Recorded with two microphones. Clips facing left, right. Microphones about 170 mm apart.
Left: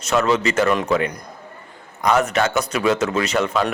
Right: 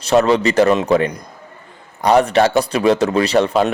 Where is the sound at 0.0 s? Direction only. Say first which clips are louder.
Right 5 dB; 35° right (ahead or behind).